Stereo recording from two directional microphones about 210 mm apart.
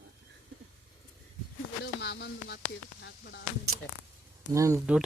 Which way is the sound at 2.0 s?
55° left (ahead or behind).